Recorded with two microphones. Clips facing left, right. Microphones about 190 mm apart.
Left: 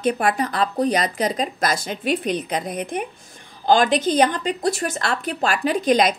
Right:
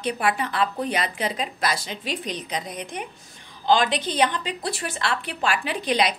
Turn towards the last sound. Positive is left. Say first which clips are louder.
# left 6 dB
turn(degrees=45)  # may be behind; listen again after turning